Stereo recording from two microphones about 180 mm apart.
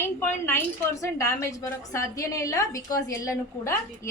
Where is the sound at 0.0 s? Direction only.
10° left (ahead or behind).